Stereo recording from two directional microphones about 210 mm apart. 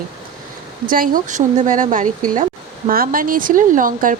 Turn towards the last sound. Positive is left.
turn(degrees=-40)  # may be behind; listen again after turning